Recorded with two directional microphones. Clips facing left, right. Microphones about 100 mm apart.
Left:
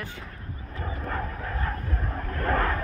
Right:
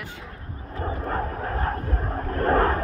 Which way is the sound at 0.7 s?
35° right (ahead or behind).